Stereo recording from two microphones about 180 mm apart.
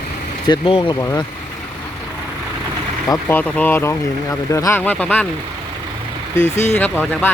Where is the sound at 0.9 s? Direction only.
15° left (ahead or behind).